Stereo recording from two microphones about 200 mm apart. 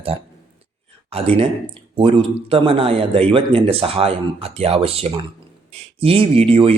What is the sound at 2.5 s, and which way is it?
Speech, 25° right (ahead or behind).